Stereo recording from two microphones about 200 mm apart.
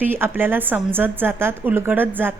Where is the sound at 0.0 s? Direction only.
10° right (ahead or behind).